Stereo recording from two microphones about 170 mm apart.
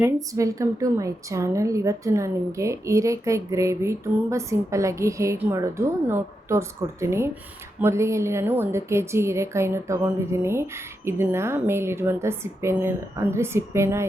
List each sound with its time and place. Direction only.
0.0 s a woman's voice: 20° right (ahead or behind)